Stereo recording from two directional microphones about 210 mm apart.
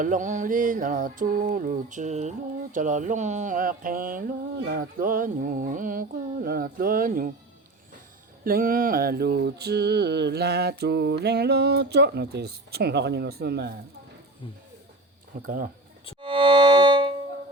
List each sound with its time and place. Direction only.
0.0 s a sound: 35° right (ahead or behind)
8.4 s mantra: 45° right (ahead or behind)
15.4 s mantra: 40° right (ahead or behind)
16.2 s music: 25° right (ahead or behind)